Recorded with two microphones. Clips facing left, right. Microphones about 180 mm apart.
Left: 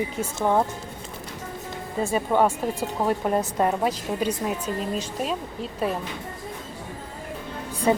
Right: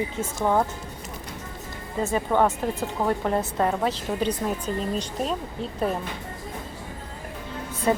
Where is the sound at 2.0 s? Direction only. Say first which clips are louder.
Left 1 dB; 10° left (ahead or behind).